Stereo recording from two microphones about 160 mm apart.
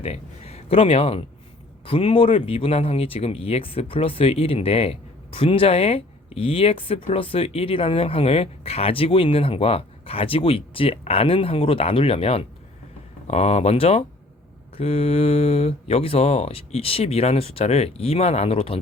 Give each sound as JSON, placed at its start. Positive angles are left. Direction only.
{"t": 0.0, "sound": "speech", "side_deg": 40}